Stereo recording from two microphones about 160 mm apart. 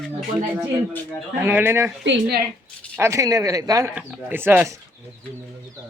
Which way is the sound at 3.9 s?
10° right (ahead or behind).